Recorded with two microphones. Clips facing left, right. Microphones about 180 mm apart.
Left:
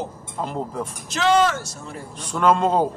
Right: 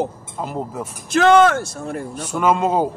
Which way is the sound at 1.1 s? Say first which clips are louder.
Right 6 dB; 55° right (ahead or behind).